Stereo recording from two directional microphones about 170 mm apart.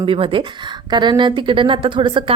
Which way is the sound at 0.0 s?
30° right (ahead or behind).